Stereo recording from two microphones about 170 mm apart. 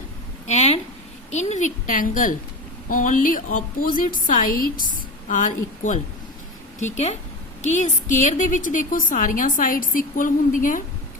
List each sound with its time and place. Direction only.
0.4 s a woman's voice: 40° left (ahead or behind)